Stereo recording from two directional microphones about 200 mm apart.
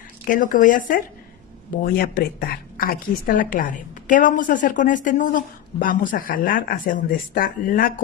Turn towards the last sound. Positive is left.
turn(degrees=45)  # may be behind; listen again after turning